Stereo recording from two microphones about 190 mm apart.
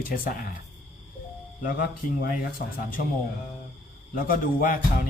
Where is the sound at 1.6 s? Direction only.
50° left (ahead or behind).